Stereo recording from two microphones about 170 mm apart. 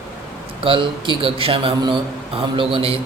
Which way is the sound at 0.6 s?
30° right (ahead or behind).